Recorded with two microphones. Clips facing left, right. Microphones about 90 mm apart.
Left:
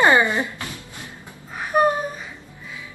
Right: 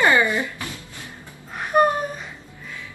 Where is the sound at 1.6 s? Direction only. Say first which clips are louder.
Right 1 dB; centre (ahead or behind).